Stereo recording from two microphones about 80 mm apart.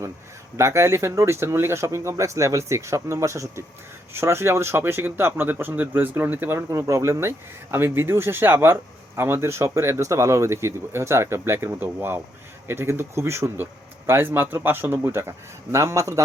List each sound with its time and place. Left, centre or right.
0.5 s speech: right